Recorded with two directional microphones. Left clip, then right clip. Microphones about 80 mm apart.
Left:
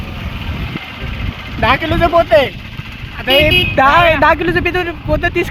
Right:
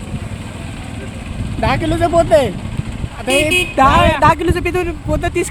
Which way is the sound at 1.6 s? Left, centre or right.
Centre.